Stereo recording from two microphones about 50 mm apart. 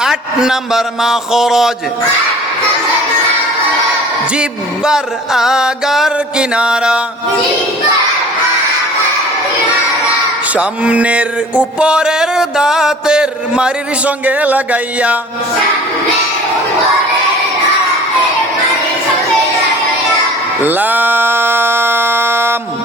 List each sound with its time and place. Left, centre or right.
0.0 s a man's voice: centre
4.4 s music: centre
6.3 s music: centre
10.5 s music: right
14.3 s music: right
20.6 s a sound: right